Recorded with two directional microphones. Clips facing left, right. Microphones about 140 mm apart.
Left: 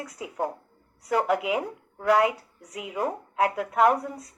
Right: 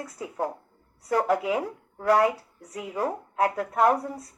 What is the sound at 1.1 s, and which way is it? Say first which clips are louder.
Speech: even; 10° left (ahead or behind).